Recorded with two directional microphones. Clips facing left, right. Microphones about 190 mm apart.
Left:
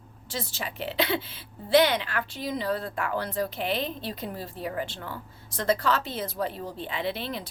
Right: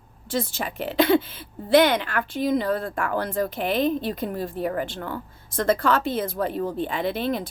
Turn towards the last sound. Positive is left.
turn(degrees=-50)  # may be behind; listen again after turning